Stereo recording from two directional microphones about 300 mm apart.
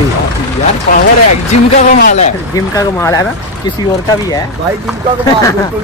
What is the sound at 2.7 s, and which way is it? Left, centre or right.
Speech, centre.